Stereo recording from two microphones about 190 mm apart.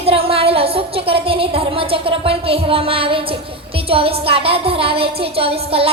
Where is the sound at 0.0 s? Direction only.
30° right (ahead or behind).